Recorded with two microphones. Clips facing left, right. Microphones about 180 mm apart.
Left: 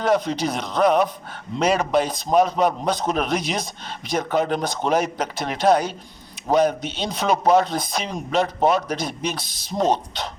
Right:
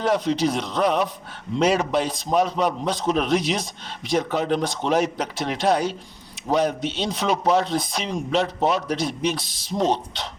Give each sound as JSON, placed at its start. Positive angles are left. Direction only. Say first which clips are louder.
{"t": 0.0, "sound": "a man's voice", "louder": "even", "side_deg": 50}